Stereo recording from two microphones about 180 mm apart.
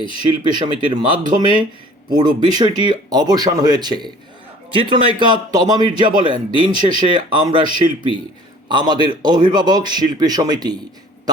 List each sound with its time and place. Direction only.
0.3 s speech: 25° right (ahead or behind)